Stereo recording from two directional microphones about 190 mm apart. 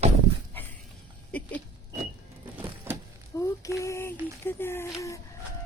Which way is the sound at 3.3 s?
15° left (ahead or behind).